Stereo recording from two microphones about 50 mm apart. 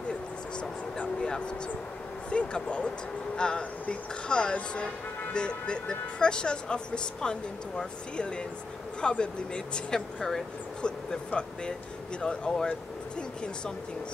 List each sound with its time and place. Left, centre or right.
0.9 s vehicle: centre
2.2 s speech: left